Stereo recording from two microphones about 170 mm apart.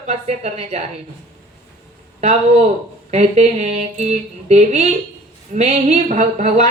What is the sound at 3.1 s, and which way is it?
A woman's voice, 40° right (ahead or behind).